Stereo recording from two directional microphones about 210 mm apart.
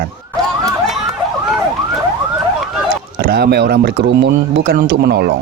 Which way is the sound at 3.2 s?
45° right (ahead or behind).